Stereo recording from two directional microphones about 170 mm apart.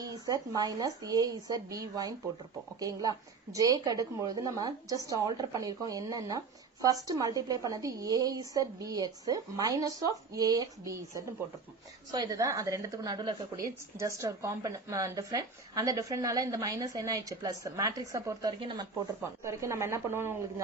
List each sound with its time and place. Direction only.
0.0 s a woman's voice: 20° right (ahead or behind)